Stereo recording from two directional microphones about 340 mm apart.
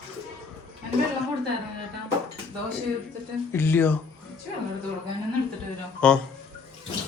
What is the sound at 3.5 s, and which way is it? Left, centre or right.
Speech, centre.